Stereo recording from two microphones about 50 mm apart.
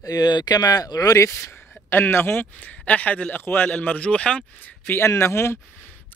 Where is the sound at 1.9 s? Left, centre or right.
Left.